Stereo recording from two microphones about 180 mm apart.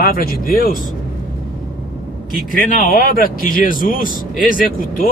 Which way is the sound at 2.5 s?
50° left (ahead or behind).